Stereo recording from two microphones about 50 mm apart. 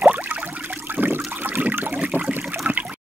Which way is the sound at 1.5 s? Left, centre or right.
Right.